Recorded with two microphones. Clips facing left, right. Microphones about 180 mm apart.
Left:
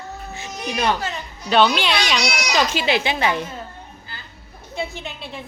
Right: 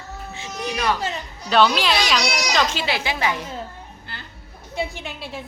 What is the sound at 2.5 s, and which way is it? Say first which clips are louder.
Speech: left 5 dB; 15° left (ahead or behind).